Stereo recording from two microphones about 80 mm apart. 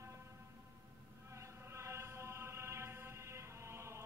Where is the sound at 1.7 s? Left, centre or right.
Right.